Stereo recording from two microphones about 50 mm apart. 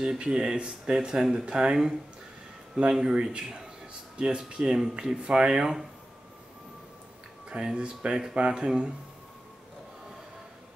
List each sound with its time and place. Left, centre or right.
0.0 s speech: centre
7.4 s speech: centre